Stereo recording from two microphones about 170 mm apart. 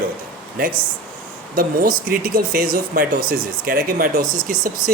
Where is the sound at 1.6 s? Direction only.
60° right (ahead or behind).